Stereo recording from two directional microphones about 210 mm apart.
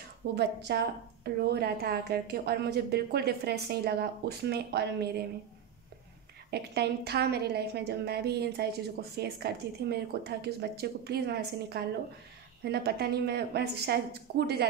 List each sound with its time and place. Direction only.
0.4 s a woman's voice: 50° right (ahead or behind)
6.5 s a woman's voice: 50° right (ahead or behind)